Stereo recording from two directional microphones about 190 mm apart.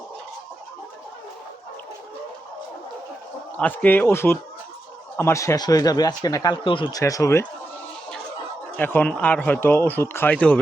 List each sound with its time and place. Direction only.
3.6 s speech: 10° left (ahead or behind)
8.7 s speech: 10° left (ahead or behind)